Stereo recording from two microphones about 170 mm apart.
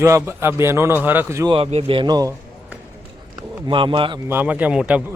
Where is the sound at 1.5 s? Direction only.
35° right (ahead or behind).